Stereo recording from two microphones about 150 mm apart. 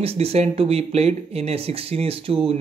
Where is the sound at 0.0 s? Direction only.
40° right (ahead or behind).